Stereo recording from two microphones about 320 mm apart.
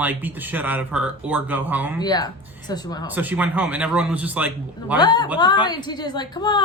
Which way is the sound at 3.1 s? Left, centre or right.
Centre.